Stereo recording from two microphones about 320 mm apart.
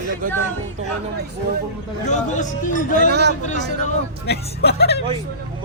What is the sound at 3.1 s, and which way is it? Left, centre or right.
Speech, right.